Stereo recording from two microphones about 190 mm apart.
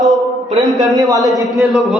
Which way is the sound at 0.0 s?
Centre (ahead or behind).